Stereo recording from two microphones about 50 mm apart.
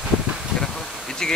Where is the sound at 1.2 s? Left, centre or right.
Centre.